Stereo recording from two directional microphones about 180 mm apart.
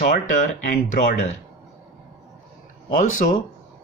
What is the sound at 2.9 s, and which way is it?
Speech, 45° left (ahead or behind).